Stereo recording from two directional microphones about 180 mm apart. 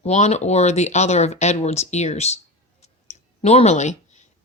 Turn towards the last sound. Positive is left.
turn(degrees=40)  # may be behind; listen again after turning